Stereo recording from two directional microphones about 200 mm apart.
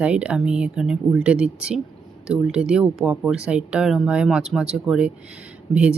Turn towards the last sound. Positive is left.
turn(degrees=-5)  # may be behind; listen again after turning